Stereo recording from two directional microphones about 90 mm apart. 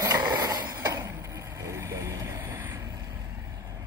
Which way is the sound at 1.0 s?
35° right (ahead or behind).